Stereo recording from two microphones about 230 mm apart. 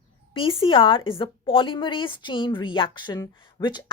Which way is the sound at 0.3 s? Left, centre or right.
Left.